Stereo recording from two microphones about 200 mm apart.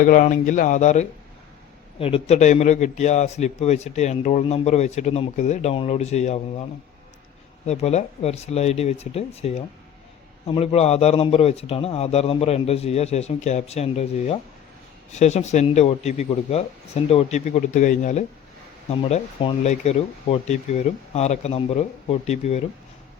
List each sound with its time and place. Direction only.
0.0 s a man's voice: 40° left (ahead or behind)
7.7 s a man's voice: 35° left (ahead or behind)